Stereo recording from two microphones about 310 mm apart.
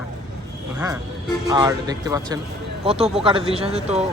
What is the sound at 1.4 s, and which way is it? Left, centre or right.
Speech, centre.